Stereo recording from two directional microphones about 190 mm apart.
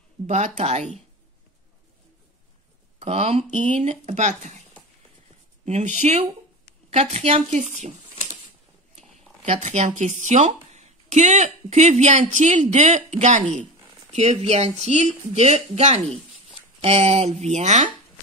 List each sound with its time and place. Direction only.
0.3 s speech: 35° right (ahead or behind)
3.0 s speech: 30° right (ahead or behind)
5.7 s speech: 35° right (ahead or behind)
9.4 s speech: 40° right (ahead or behind)